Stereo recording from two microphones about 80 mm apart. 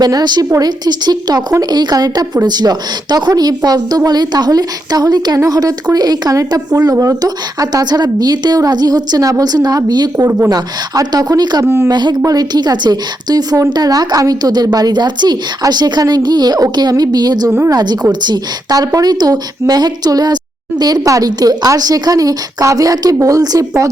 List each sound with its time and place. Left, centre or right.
0.0 s a woman's voice: right
10.2 s speech: right
10.5 s a woman's voice: right
11.6 s a woman's voice: right
11.9 s a woman's voice: right
12.2 s a woman's voice: right